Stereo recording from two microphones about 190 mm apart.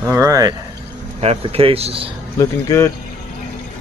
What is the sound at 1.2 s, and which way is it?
Speech, 30° right (ahead or behind).